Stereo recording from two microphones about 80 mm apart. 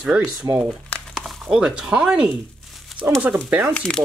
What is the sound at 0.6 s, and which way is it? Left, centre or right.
Speech, centre.